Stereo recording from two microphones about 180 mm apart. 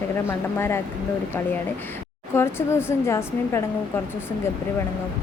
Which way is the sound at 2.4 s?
15° left (ahead or behind).